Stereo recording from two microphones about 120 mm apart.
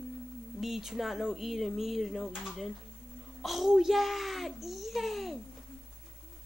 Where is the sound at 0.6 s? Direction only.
Centre (ahead or behind).